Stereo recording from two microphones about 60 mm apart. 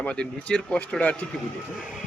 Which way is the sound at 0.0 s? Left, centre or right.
Left.